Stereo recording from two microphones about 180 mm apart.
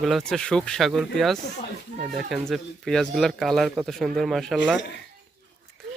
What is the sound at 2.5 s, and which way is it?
Speech, centre (ahead or behind).